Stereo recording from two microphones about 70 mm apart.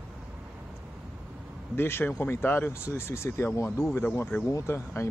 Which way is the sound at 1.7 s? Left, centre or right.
Left.